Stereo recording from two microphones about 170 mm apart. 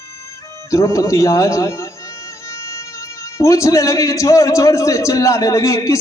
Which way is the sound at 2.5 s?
15° left (ahead or behind).